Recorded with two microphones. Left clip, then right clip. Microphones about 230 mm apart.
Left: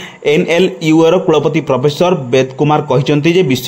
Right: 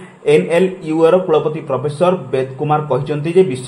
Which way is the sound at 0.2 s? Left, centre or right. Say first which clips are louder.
Left 1 dB; left.